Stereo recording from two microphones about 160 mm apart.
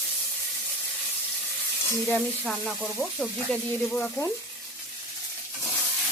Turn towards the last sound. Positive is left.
turn(degrees=10)  # may be behind; listen again after turning